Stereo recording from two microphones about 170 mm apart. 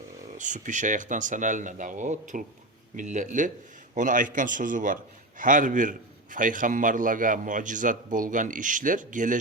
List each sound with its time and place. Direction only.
0.3 s a man's voice: 45° right (ahead or behind)